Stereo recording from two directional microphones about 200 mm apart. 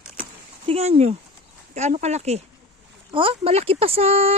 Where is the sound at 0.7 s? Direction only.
30° right (ahead or behind).